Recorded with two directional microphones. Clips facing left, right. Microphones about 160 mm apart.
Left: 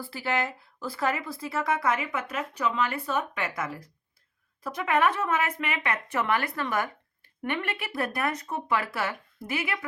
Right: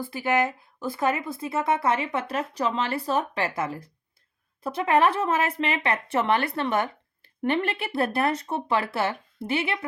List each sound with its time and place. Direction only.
0.0 s speech: 20° right (ahead or behind)